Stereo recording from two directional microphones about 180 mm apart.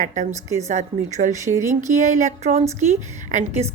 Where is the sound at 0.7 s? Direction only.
40° right (ahead or behind).